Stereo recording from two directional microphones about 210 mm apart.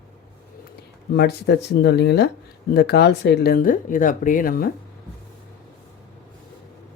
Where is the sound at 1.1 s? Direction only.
50° left (ahead or behind).